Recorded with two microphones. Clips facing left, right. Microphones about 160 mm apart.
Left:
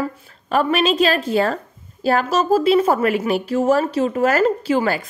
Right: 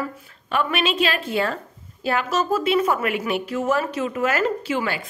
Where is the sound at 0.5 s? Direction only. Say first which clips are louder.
Left 5 dB; 40° left (ahead or behind).